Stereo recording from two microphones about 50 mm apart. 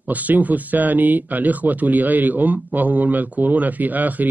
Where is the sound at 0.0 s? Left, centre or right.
Right.